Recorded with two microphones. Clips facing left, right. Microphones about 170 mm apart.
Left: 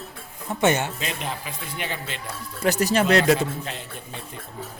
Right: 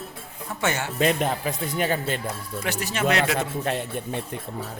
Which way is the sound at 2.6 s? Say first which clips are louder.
Left 5 dB; 40° left (ahead or behind).